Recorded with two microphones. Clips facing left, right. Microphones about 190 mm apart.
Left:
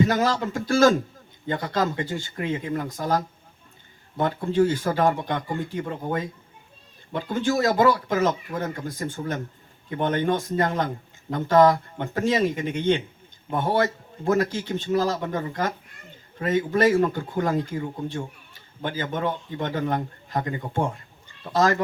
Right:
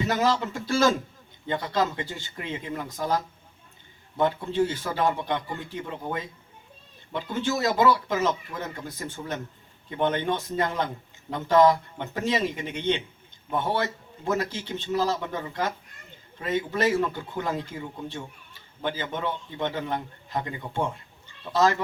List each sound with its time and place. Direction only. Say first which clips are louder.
0.0 s a man's voice: left 3 dB; 45° left (ahead or behind)
18.9 s a man's voice: left 3 dB; 45° left (ahead or behind)